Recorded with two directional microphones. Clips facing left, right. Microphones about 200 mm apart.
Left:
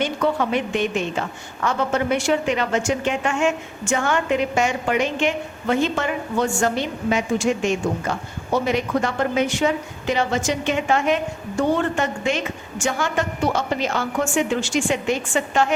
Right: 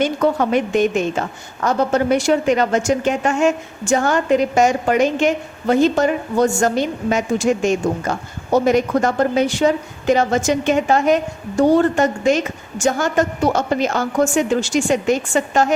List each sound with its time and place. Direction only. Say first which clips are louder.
0.0 s a woman's voice: right 4 dB; 45° right (ahead or behind)